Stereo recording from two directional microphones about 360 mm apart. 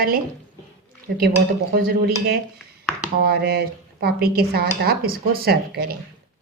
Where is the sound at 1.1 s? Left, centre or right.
Right.